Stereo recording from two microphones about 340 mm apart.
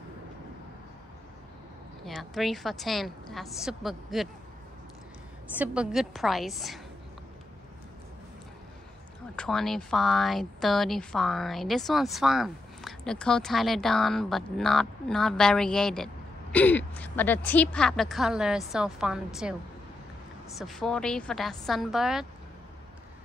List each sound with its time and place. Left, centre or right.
2.0 s speech: centre
5.6 s speech: centre
9.3 s speech: centre
20.5 s speech: centre